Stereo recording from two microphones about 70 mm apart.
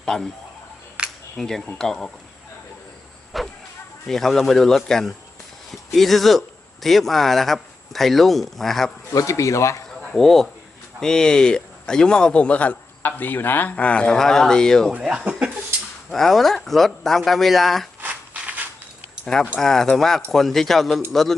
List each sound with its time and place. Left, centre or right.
0.0 s speech: centre
1.0 s camera: centre
1.4 s a man's voice: centre
3.3 s speech: centre
9.1 s speech: left
10.0 s a man's voice: centre
15.0 s speech: centre
16.0 s speech: centre
18.0 s a sound: right
19.2 s a man's voice: centre